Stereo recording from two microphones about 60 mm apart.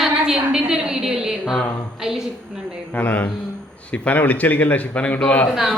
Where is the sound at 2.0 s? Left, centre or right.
Centre.